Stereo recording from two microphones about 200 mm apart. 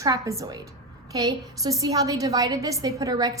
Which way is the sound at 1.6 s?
15° right (ahead or behind).